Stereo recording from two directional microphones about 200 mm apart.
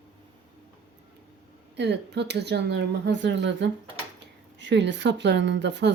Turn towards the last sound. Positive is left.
turn(degrees=-60)  # may be behind; listen again after turning